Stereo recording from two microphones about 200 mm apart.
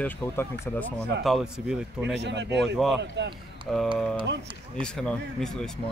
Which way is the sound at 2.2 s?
60° right (ahead or behind).